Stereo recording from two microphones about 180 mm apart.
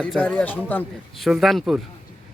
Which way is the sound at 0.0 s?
5° left (ahead or behind).